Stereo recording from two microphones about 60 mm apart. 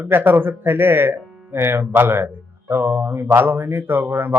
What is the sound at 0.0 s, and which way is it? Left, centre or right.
A man's voice, right.